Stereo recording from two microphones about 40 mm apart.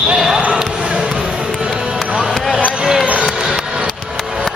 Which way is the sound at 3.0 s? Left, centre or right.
Right.